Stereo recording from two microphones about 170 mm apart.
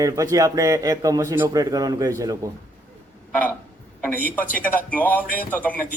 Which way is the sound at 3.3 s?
10° left (ahead or behind).